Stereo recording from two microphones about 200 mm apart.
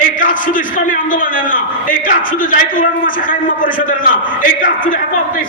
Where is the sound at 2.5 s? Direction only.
40° left (ahead or behind).